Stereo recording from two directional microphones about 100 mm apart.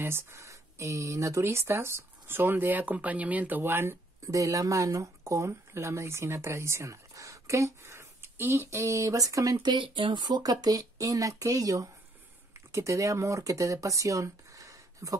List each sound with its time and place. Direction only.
0.0 s speech: 25° right (ahead or behind)
9.7 s speech: 55° right (ahead or behind); by 15.1 s 35° right (ahead or behind)